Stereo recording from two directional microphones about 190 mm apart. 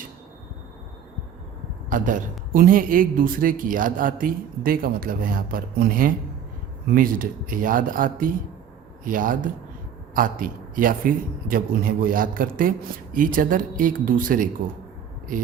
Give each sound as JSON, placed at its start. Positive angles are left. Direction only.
{"t": 1.9, "sound": "a man's voice", "side_deg": -45}